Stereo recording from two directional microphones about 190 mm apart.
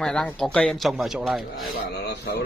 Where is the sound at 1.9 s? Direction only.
60° left (ahead or behind).